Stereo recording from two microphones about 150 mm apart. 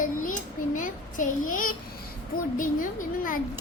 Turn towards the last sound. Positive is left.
turn(degrees=65)  # may be behind; listen again after turning